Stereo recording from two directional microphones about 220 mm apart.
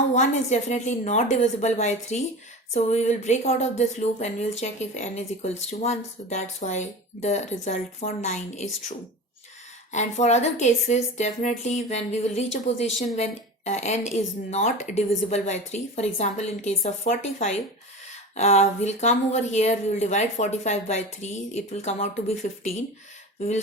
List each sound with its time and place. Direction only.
0.1 s speech: 30° left (ahead or behind)
9.9 s speech: 30° left (ahead or behind)